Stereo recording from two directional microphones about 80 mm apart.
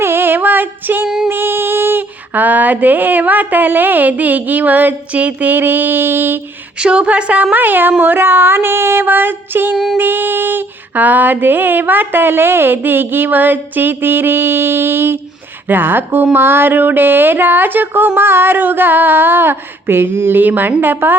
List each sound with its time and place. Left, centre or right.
0.0 s female singing: right
1.0 s music: centre
1.3 s female singing: right
6.7 s speech: centre
7.5 s female singing: right
9.7 s music: centre
10.0 s female singing: right